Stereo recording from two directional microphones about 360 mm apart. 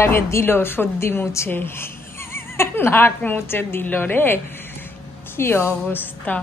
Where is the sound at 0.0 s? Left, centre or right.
Centre.